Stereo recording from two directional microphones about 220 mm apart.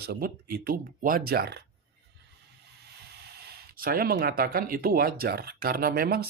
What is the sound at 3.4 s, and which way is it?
Speech, 45° right (ahead or behind).